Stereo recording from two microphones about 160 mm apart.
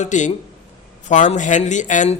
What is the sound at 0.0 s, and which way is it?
A man's voice, 50° left (ahead or behind).